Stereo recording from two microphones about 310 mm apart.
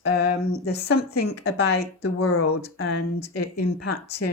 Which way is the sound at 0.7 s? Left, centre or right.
Left.